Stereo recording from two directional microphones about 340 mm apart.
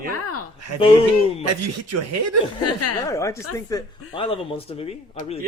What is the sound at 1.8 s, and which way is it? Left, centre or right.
Speech, right.